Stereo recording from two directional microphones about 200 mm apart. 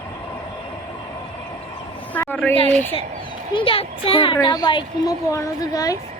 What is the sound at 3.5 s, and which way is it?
A child's voice, 25° left (ahead or behind).